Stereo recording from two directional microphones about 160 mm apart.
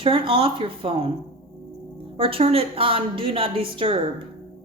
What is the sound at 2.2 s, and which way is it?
A woman's voice, 35° right (ahead or behind).